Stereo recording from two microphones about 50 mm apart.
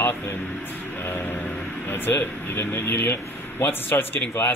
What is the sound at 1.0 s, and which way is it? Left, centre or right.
Vehicle, left.